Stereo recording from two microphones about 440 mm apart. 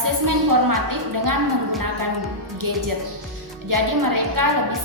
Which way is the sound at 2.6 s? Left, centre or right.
Right.